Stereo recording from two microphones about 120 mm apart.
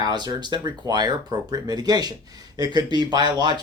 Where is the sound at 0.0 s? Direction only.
35° right (ahead or behind).